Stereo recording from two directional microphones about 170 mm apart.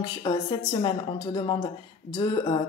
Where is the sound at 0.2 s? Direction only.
30° left (ahead or behind).